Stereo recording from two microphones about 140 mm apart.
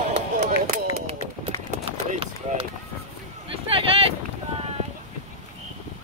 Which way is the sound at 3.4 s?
40° right (ahead or behind).